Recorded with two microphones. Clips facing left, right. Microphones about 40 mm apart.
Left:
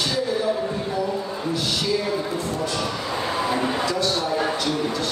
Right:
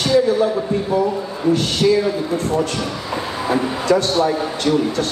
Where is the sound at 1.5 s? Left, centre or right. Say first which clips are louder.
Right 9 dB; right.